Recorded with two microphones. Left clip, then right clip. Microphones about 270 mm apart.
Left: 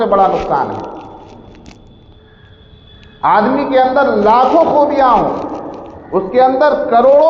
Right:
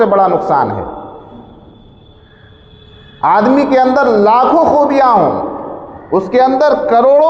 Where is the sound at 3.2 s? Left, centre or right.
Right.